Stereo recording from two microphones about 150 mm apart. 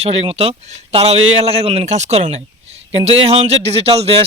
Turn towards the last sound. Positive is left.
turn(degrees=-40)  # may be behind; listen again after turning